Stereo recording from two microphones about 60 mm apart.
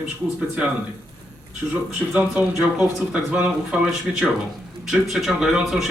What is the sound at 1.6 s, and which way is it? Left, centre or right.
Speech, right.